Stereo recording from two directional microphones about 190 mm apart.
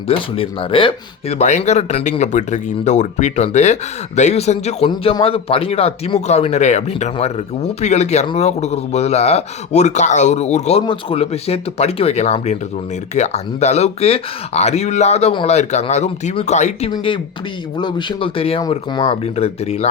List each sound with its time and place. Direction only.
0.1 s speech: 30° left (ahead or behind)
16.9 s speech: 25° left (ahead or behind)